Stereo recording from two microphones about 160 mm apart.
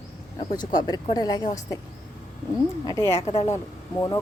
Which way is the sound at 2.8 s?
20° left (ahead or behind).